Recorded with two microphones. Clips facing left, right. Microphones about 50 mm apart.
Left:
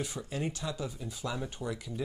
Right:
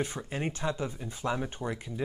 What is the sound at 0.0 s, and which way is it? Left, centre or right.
Speech, right.